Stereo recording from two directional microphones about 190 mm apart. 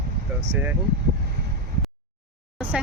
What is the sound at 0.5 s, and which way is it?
Speech, 10° right (ahead or behind).